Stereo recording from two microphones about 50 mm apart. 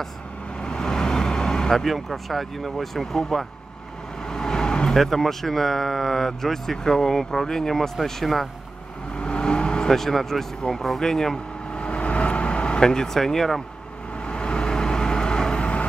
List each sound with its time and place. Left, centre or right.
0.6 s speech: centre
4.3 s vehicle: centre
4.9 s speech: centre
9.1 s vehicle: centre
10.6 s speech: centre
11.8 s vehicle: left; by 13.6 s centre
14.2 s vehicle: centre